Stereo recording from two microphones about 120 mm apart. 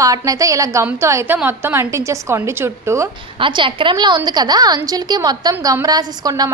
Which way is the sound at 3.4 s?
45° right (ahead or behind).